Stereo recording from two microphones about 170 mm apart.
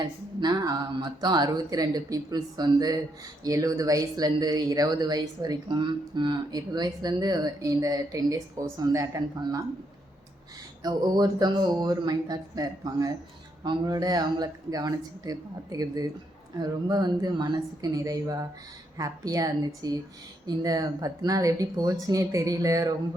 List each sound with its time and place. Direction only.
0.0 s speech: 25° right (ahead or behind)
10.8 s speech: 25° right (ahead or behind)